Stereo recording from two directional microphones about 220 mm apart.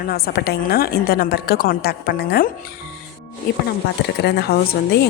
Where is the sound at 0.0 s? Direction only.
45° left (ahead or behind).